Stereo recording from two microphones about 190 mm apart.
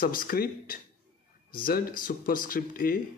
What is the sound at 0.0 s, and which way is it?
Speech, 50° left (ahead or behind).